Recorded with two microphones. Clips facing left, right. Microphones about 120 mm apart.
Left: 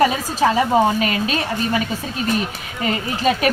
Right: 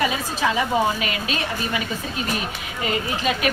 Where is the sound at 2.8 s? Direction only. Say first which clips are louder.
Left 4 dB; 40° left (ahead or behind).